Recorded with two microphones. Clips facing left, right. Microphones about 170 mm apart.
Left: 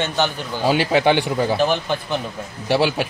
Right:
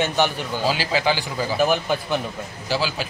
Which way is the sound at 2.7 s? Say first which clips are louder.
Left 6 dB; 65° left (ahead or behind).